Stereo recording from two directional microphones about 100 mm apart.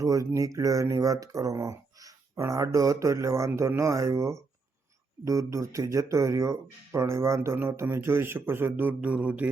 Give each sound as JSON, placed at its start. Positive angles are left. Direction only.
{"t": 0.0, "sound": "speech", "side_deg": -35}